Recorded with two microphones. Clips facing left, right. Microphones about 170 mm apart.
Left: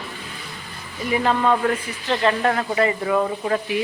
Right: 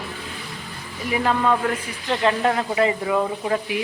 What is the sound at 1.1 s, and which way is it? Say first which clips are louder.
Speech: left 1 dB; centre (ahead or behind).